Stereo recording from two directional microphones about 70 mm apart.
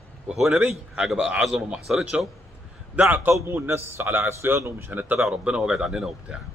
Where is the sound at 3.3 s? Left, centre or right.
Right.